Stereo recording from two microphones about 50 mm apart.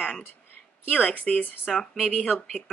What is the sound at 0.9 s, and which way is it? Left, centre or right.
Speech, left.